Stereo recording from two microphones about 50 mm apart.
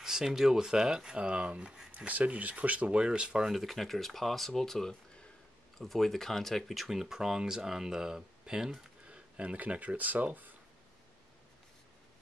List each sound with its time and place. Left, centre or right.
0.0 s speech: centre
1.9 s speech: right
3.4 s speech: centre
9.0 s speech: right